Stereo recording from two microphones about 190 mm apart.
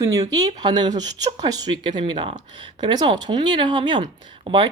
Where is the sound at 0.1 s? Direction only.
20° right (ahead or behind).